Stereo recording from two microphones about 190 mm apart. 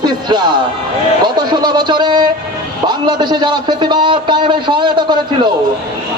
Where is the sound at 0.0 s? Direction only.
25° right (ahead or behind).